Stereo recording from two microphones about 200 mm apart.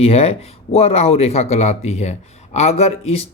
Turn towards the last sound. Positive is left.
turn(degrees=30)  # may be behind; listen again after turning